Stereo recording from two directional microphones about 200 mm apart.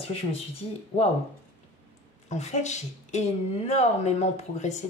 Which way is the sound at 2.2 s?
35° left (ahead or behind).